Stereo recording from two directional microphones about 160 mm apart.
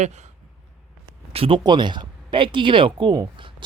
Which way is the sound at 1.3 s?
35° right (ahead or behind).